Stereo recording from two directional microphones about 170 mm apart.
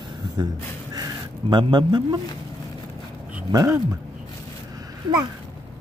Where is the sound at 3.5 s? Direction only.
20° right (ahead or behind).